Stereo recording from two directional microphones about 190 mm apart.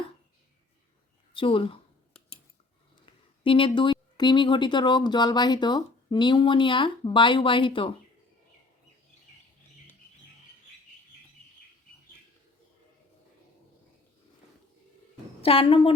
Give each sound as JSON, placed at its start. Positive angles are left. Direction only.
{"t": 1.3, "sound": "a sound", "side_deg": 30}
{"t": 4.2, "sound": "speech", "side_deg": 25}
{"t": 15.4, "sound": "speech", "side_deg": 30}